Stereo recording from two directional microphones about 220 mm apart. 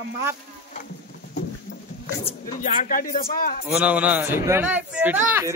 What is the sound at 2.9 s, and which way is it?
Speech, 40° left (ahead or behind).